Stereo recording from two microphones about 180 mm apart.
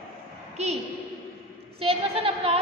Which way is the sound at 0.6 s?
35° right (ahead or behind).